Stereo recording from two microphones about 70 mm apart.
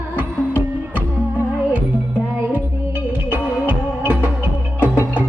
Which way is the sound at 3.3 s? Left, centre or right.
Right.